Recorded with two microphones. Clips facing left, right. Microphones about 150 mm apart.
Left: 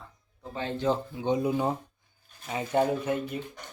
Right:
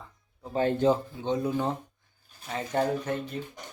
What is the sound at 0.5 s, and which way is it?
Speech, 50° right (ahead or behind).